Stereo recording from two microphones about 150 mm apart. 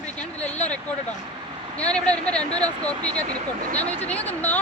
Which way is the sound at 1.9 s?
5° left (ahead or behind).